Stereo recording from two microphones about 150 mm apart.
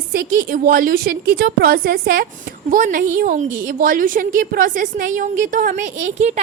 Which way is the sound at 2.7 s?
65° right (ahead or behind).